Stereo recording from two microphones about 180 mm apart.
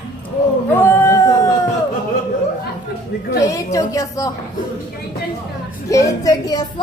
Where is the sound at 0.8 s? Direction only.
15° left (ahead or behind).